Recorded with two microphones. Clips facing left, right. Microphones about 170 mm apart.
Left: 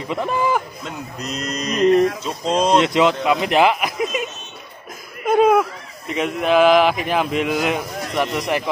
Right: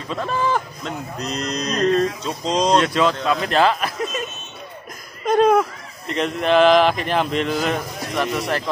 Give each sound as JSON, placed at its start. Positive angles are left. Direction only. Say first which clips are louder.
{"t": 0.1, "sound": "speech", "louder": "left 2 dB", "side_deg": 15}
{"t": 2.8, "sound": "speech", "louder": "left 2 dB", "side_deg": 20}